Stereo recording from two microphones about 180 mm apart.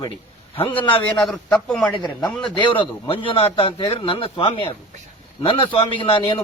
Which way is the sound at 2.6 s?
25° left (ahead or behind).